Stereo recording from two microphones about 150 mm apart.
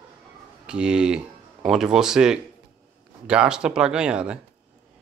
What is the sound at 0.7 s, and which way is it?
Speech, 5° right (ahead or behind).